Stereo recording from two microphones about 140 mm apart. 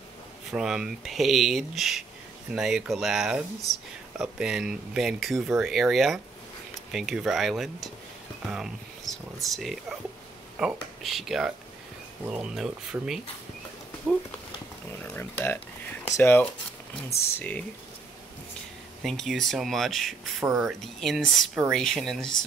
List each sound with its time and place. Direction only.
0.5 s speech: 5° right (ahead or behind)
14.9 s speech: 15° left (ahead or behind)
19.0 s speech: centre (ahead or behind)